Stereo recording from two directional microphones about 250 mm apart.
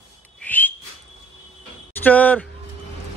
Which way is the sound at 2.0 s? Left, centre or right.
Centre.